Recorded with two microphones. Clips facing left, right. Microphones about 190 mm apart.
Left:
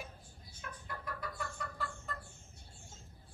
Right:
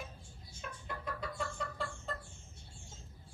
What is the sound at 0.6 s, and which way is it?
Chicken, 25° right (ahead or behind).